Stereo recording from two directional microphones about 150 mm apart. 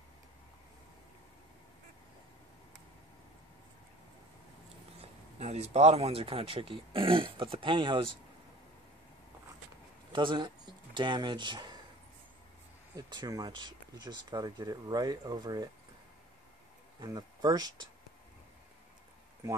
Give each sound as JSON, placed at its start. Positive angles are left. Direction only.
{"t": 5.4, "sound": "speech", "side_deg": -45}
{"t": 10.1, "sound": "speech", "side_deg": -30}
{"t": 12.9, "sound": "speech", "side_deg": -25}
{"t": 17.0, "sound": "speech", "side_deg": -25}